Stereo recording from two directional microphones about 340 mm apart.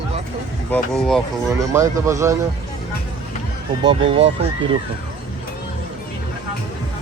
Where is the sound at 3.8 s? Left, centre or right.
Centre.